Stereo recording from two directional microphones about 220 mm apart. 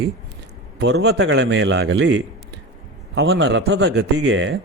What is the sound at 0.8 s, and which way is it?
A man's voice, 50° right (ahead or behind).